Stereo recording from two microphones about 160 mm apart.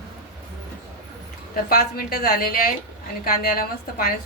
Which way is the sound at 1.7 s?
70° left (ahead or behind).